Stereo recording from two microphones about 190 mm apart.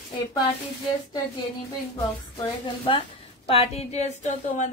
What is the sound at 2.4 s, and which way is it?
A woman's voice, 30° left (ahead or behind).